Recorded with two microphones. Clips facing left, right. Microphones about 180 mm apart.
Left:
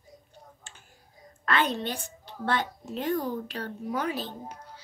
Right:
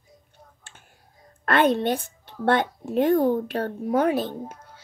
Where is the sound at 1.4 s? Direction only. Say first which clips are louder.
Right 7 dB; 55° right (ahead or behind).